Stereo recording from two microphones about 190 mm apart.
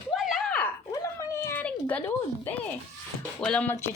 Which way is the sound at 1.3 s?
10° left (ahead or behind).